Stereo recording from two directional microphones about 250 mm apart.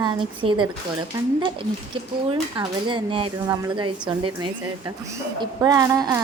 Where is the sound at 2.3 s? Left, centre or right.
Centre.